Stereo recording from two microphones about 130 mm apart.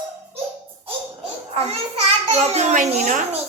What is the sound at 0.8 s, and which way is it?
Babbling, 45° right (ahead or behind).